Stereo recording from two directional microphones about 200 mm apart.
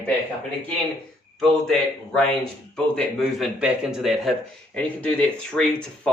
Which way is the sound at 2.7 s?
5° left (ahead or behind).